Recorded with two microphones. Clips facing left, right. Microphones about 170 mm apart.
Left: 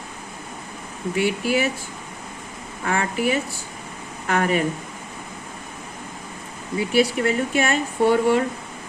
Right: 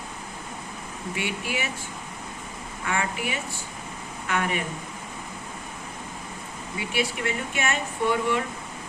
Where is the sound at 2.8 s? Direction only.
40° left (ahead or behind).